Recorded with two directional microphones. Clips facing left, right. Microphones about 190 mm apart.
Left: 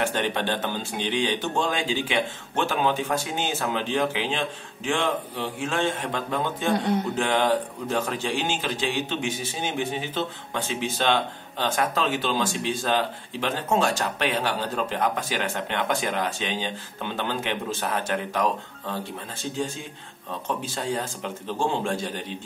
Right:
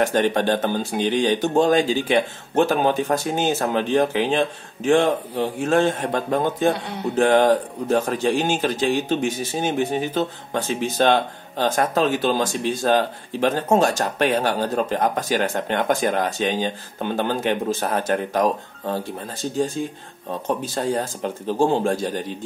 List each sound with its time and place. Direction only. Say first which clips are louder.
0.0 s a man's voice: right 7 dB; 40° right (ahead or behind)
20.4 s speech: right 5 dB; 40° right (ahead or behind)